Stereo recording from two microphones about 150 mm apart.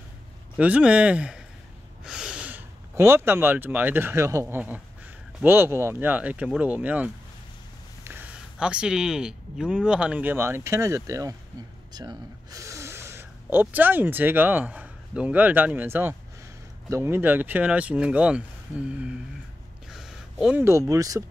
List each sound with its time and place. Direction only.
0.6 s speech: 10° right (ahead or behind)
19.9 s a sound: centre (ahead or behind)
20.9 s speech: 25° right (ahead or behind)